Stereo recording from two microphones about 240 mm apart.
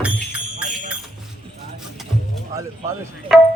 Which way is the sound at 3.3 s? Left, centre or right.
Right.